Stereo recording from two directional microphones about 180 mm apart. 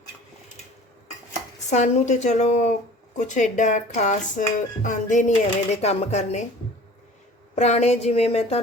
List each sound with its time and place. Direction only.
1.7 s speech: 40° left (ahead or behind)
7.5 s speech: 40° left (ahead or behind)